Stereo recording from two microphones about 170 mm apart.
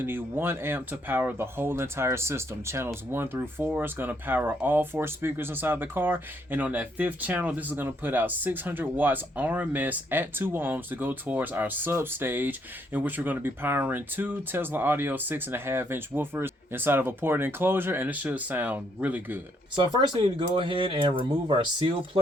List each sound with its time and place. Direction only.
0.0 s speech: 10° right (ahead or behind)
19.7 s speech: 30° right (ahead or behind)